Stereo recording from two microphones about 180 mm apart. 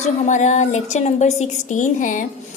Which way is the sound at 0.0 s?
40° left (ahead or behind).